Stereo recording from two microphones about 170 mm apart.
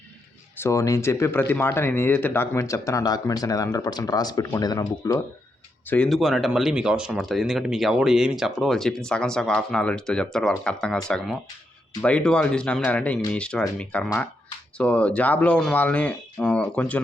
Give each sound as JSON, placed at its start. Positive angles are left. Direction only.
{"t": 0.6, "sound": "speech", "side_deg": 15}
{"t": 5.9, "sound": "speech", "side_deg": 5}